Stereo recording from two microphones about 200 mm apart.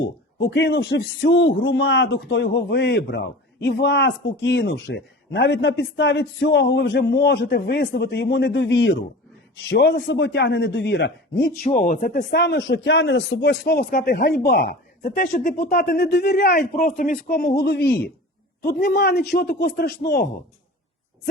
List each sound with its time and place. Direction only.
0.0 s speech: 65° left (ahead or behind)
11.6 s speech: 45° left (ahead or behind)
12.3 s speech: 60° left (ahead or behind)